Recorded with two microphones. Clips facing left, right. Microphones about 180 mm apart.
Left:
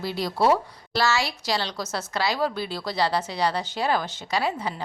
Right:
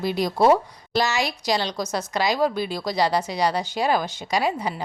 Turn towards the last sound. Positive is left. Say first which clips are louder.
# right 3 dB
turn(degrees=-15)  # may be behind; listen again after turning